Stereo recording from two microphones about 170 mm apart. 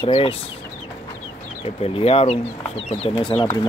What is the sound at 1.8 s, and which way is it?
Speech, 35° left (ahead or behind).